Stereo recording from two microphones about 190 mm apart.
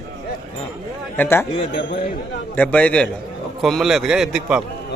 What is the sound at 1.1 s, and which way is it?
Speech, 10° left (ahead or behind).